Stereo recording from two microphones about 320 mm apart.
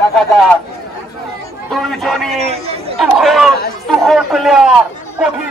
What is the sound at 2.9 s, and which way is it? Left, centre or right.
Chatter, centre.